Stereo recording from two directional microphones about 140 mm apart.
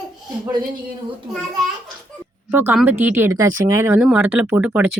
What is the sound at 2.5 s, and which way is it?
Speech, 15° right (ahead or behind).